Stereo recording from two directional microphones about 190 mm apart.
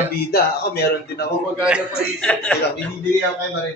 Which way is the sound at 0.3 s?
55° left (ahead or behind).